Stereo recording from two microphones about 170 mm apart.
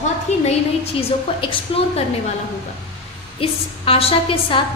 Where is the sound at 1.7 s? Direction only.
30° left (ahead or behind).